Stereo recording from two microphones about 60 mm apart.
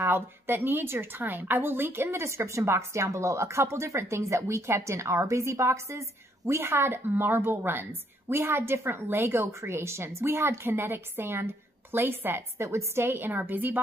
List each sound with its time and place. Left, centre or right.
0.0 s a woman's voice: right